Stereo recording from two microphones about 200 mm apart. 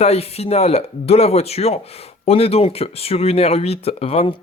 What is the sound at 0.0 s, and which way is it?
Speech, 30° left (ahead or behind).